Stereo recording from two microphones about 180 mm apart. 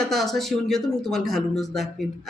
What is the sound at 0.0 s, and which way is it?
Speech, centre (ahead or behind).